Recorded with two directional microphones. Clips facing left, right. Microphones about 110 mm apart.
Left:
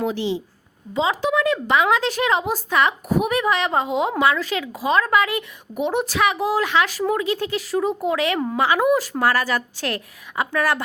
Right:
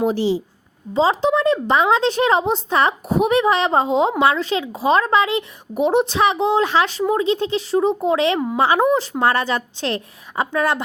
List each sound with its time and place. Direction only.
0.0 s a woman's voice: 35° right (ahead or behind)